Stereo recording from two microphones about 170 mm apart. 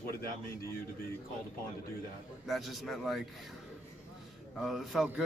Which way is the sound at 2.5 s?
Centre (ahead or behind).